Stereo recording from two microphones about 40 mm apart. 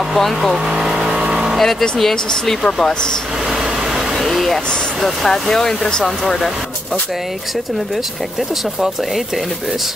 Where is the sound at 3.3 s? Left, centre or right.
Centre.